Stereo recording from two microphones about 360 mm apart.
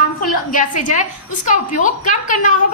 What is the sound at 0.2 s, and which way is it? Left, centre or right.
A woman's voice, left.